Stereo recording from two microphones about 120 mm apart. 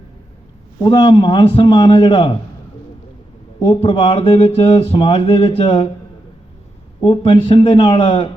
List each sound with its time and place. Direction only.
0.8 s a man's voice: 35° left (ahead or behind)
3.6 s speech: 45° left (ahead or behind)
7.0 s speech: 45° left (ahead or behind)